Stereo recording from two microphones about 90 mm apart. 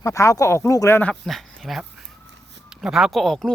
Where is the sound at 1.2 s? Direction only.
Centre (ahead or behind).